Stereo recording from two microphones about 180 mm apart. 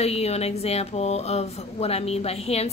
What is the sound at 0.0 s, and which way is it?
A woman's voice, 35° left (ahead or behind).